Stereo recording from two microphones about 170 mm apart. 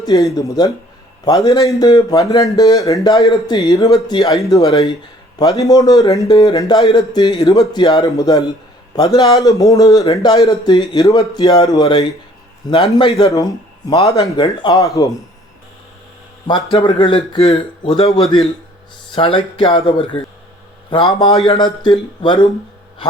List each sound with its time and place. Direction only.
0.3 s speech: 20° left (ahead or behind)
12.7 s a man's voice: 35° left (ahead or behind)
13.3 s speech: 25° left (ahead or behind)
16.7 s a man's voice: 30° left (ahead or behind)